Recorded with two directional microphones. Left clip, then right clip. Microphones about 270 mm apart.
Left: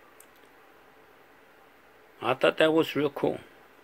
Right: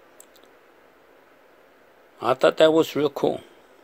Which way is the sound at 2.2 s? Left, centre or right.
Right.